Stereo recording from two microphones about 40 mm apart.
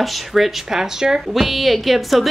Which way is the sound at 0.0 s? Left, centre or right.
Centre.